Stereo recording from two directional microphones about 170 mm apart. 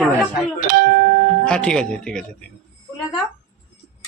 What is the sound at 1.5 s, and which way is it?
Speech, 5° left (ahead or behind).